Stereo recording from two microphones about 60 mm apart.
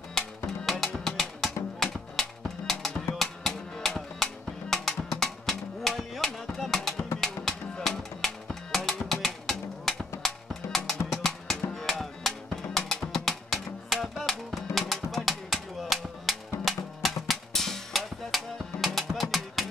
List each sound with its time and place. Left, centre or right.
0.7 s music: centre